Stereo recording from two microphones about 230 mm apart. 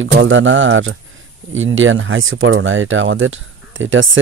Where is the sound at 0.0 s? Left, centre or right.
Right.